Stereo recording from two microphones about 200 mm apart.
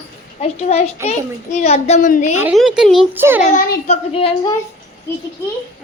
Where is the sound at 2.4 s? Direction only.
5° right (ahead or behind).